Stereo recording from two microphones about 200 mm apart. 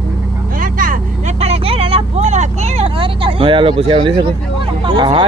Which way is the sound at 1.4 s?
30° right (ahead or behind).